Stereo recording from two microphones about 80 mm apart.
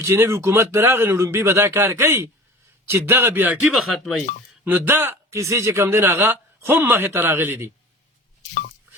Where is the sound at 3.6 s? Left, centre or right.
Centre.